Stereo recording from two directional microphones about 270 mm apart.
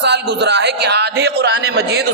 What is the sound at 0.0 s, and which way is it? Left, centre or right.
A man's voice, right.